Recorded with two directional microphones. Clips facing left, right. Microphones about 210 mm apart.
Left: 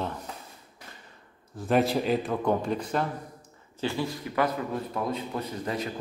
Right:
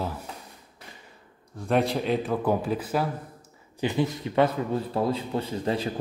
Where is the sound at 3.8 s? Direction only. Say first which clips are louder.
Right 4 dB; 20° right (ahead or behind).